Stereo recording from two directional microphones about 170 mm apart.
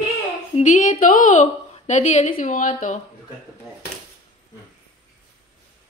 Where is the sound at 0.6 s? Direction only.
50° left (ahead or behind).